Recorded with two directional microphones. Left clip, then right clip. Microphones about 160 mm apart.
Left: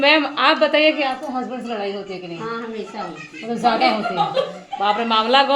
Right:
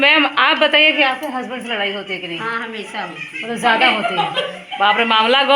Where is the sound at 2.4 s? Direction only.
20° left (ahead or behind).